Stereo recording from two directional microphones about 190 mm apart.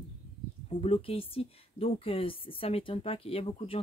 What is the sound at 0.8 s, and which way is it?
A woman's voice, 30° left (ahead or behind).